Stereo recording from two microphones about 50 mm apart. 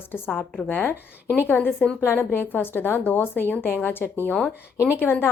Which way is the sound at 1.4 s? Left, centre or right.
Left.